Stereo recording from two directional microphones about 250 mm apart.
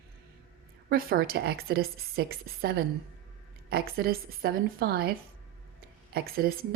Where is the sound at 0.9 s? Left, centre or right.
Right.